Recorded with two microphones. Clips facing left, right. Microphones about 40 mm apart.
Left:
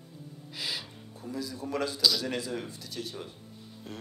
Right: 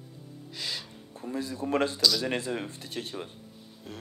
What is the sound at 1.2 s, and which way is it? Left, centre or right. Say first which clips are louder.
Speech: right 3 dB; right.